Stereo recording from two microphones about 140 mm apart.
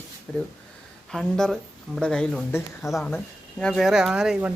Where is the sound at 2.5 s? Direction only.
20° left (ahead or behind).